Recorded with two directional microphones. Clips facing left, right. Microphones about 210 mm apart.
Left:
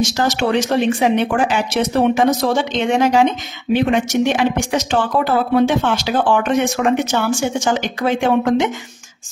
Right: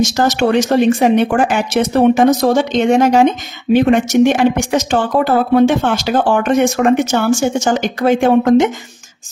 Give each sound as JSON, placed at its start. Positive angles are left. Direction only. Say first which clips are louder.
{"t": 0.2, "sound": "a woman's voice", "louder": "right 4 dB", "side_deg": -50}